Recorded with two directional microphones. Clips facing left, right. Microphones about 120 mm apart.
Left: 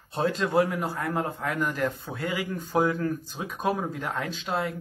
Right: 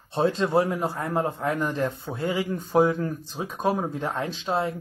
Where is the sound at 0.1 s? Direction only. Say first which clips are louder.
Right 3 dB; 25° right (ahead or behind).